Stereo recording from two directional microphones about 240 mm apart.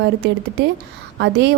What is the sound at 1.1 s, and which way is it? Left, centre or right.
Speech, right.